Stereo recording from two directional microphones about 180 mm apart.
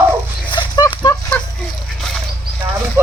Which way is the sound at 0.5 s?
25° left (ahead or behind).